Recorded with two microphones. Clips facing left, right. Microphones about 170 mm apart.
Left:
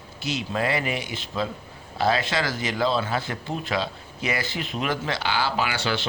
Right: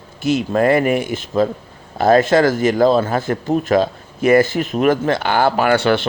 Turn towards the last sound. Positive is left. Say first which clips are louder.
# right 11 dB
turn(degrees=-55)  # may be behind; listen again after turning